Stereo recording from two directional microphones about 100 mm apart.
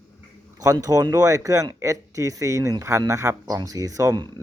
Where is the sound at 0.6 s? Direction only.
35° right (ahead or behind).